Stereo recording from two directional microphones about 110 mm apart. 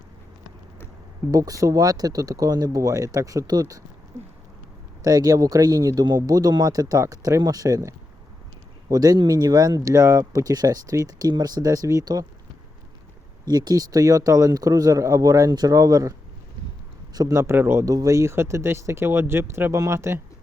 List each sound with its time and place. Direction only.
1.3 s speech: 30° right (ahead or behind)
5.0 s speech: 35° right (ahead or behind)
13.4 s speech: 35° right (ahead or behind)
17.2 s speech: 30° right (ahead or behind)